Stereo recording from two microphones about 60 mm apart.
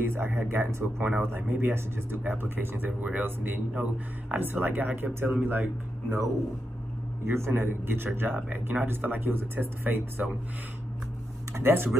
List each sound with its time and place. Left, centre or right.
0.0 s speech: right
3.7 s speech: centre
4.4 s speech: right
7.2 s speech: right
11.5 s speech: right